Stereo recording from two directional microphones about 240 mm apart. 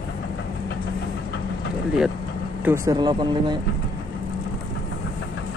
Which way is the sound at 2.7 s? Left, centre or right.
Centre.